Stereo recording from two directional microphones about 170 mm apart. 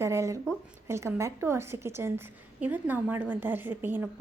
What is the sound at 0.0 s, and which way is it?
A woman's voice, 15° right (ahead or behind).